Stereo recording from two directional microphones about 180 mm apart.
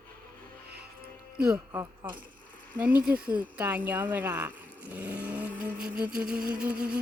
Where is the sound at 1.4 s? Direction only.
5° right (ahead or behind).